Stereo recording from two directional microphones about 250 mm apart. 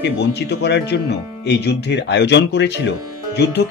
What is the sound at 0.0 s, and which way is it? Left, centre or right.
Speech, left.